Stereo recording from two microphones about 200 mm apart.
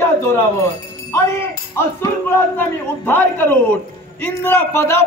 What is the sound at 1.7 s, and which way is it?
A man's voice, 10° left (ahead or behind).